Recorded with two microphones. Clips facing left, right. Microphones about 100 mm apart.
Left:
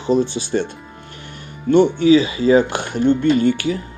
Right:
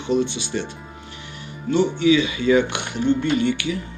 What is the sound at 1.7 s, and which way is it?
Speech, 50° left (ahead or behind).